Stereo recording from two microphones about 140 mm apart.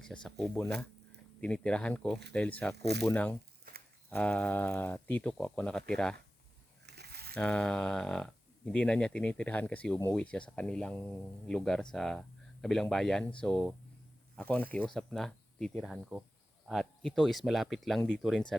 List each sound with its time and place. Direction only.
0.0 s speech: 5° left (ahead or behind)
7.1 s a sound: 90° right
7.3 s speech: 10° left (ahead or behind)